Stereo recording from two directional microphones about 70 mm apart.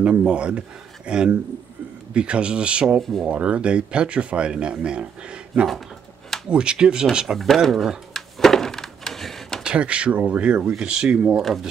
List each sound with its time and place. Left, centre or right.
0.0 s speech: centre
3.0 s speech: centre
3.3 s speech: centre
7.3 s a sound: centre
9.7 s speech: centre